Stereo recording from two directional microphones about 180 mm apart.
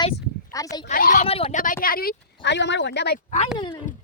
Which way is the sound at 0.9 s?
50° left (ahead or behind).